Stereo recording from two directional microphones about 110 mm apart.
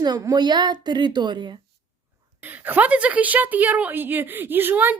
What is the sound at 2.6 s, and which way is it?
A woman's voice, 15° right (ahead or behind).